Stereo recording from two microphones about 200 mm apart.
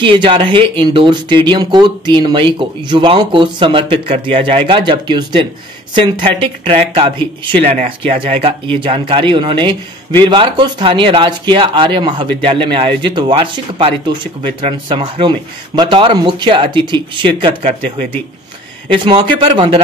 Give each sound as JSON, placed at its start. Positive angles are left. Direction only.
{"t": 0.0, "sound": "speech", "side_deg": -25}